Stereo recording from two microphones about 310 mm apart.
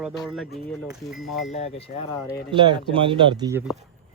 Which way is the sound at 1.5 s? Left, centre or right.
Centre.